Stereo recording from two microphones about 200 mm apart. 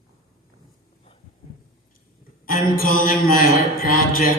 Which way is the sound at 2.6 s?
45° left (ahead or behind).